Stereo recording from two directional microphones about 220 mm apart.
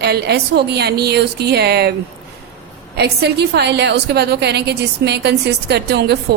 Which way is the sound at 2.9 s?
50° right (ahead or behind).